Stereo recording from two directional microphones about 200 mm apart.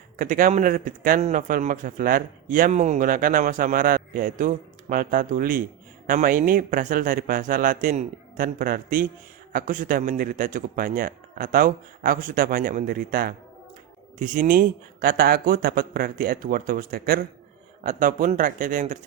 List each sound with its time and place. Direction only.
0.2 s speech: 40° right (ahead or behind)